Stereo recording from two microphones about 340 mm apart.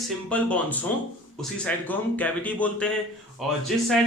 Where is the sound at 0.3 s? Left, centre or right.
Centre.